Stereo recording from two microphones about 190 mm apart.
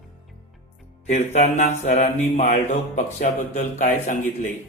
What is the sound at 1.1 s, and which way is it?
Mantra, 35° left (ahead or behind).